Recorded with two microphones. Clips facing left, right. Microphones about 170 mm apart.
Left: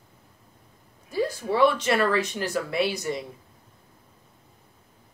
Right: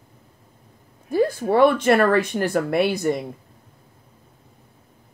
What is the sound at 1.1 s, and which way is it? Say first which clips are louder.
Speech: right 6 dB; 55° right (ahead or behind).